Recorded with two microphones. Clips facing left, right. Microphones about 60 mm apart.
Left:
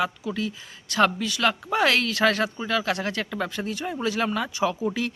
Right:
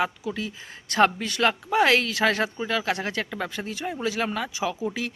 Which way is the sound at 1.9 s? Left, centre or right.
Centre.